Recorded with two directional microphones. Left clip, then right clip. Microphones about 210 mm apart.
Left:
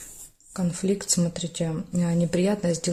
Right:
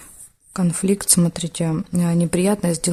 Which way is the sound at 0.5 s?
35° right (ahead or behind).